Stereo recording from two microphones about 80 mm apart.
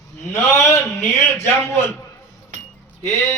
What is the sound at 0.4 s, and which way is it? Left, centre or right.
A man's voice, left.